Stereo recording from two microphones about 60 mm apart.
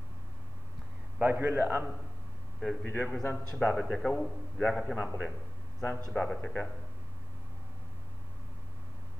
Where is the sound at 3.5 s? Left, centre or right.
Centre.